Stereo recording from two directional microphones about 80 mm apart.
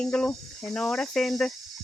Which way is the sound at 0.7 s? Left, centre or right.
Centre.